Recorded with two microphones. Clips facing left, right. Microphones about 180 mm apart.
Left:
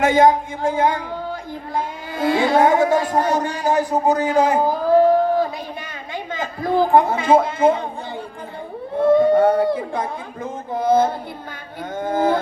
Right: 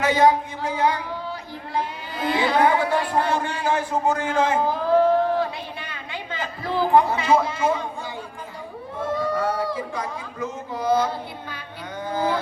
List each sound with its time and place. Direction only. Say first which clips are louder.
0.0 s a man's voice: left 4 dB; 50° left (ahead or behind)
9.2 s a sound: left 9 dB; 55° left (ahead or behind)
11.9 s a man's voice: left 5 dB; 50° left (ahead or behind)